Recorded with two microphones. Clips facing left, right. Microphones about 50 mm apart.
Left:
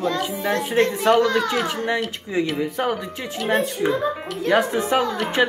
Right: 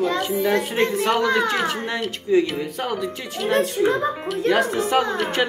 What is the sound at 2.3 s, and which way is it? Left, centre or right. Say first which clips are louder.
Speech: right 6 dB; centre.